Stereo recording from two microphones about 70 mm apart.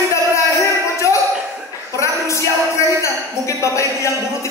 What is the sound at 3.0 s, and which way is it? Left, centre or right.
Speech, left.